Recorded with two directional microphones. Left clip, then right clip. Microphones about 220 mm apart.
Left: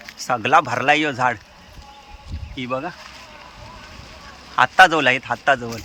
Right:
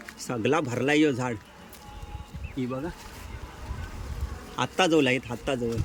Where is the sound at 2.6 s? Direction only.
25° left (ahead or behind).